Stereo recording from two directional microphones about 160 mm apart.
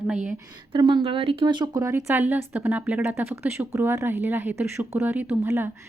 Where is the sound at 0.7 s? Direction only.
30° right (ahead or behind).